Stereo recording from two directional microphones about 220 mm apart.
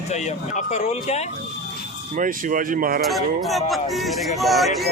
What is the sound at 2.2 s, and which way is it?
Speech, 35° right (ahead or behind).